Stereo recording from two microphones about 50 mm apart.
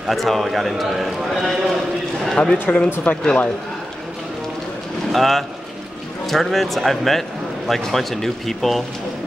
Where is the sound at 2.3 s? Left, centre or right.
Centre.